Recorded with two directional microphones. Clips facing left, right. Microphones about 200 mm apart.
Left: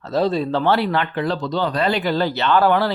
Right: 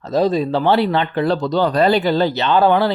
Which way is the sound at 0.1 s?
15° right (ahead or behind).